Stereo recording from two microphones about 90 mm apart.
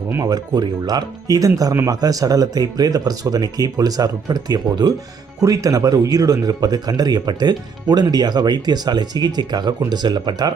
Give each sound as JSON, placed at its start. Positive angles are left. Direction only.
{"t": 0.2, "sound": "speech", "side_deg": -45}